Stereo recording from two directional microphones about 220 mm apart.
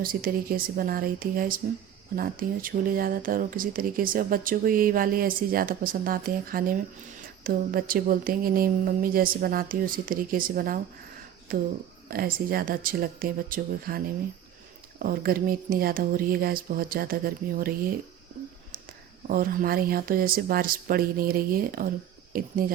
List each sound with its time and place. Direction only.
0.0 s speech: 40° right (ahead or behind)
19.3 s speech: 40° right (ahead or behind)